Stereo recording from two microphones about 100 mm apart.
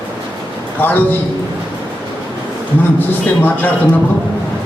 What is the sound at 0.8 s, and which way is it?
Speech, 20° left (ahead or behind).